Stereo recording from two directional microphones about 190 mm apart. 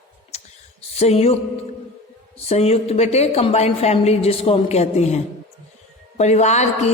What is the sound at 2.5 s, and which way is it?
A woman's voice, 35° left (ahead or behind).